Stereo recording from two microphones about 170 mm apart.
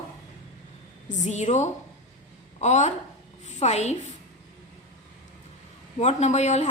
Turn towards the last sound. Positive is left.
turn(degrees=40)  # may be behind; listen again after turning